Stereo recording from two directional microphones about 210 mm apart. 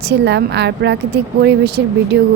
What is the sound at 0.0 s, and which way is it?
A woman's voice, 50° right (ahead or behind).